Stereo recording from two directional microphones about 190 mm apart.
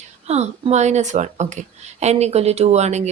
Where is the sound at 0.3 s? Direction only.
35° right (ahead or behind).